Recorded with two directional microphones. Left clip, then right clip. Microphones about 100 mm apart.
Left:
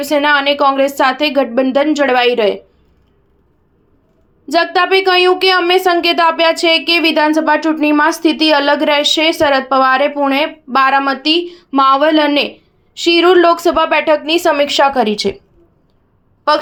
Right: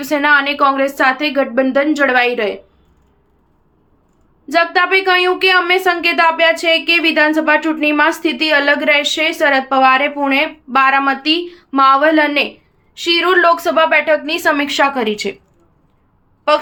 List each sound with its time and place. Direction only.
0.0 s speech: 35° left (ahead or behind)
4.4 s speech: 40° left (ahead or behind)